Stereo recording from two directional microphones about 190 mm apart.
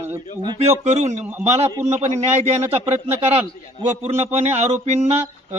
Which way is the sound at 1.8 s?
35° right (ahead or behind).